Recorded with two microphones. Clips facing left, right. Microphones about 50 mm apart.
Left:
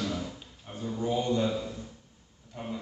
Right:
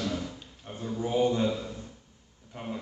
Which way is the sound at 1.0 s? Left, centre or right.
Right.